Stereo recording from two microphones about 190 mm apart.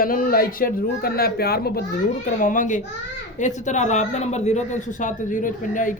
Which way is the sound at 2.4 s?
45° left (ahead or behind).